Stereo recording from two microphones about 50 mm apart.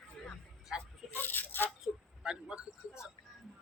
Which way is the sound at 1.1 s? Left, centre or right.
Left.